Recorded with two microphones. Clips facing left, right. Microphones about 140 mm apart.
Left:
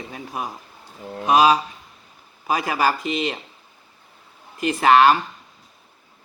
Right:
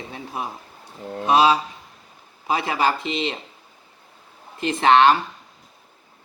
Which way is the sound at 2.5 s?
25° right (ahead or behind).